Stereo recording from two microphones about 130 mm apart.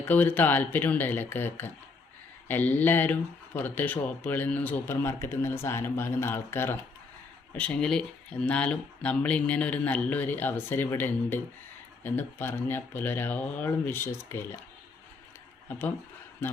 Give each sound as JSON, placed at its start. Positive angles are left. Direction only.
{"t": 0.0, "sound": "speech", "side_deg": 15}